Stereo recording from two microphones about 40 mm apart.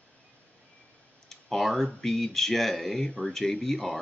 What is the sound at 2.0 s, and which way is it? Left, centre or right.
Speech, centre.